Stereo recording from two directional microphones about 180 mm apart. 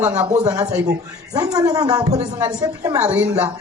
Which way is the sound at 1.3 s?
20° right (ahead or behind).